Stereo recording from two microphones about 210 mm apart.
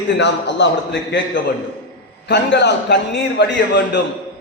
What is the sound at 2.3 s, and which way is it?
A man's voice, 55° left (ahead or behind).